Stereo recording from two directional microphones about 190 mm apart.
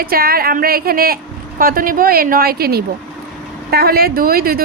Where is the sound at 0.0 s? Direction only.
50° right (ahead or behind).